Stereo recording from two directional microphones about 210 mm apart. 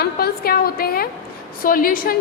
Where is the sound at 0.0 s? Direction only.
45° left (ahead or behind).